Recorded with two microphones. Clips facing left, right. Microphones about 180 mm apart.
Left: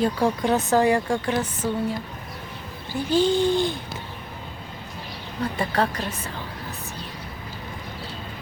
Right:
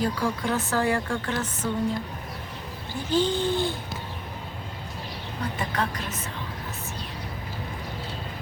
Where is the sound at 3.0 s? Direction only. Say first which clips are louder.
Left 4 dB; 10° left (ahead or behind).